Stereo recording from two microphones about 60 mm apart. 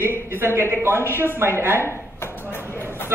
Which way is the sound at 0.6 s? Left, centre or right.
Right.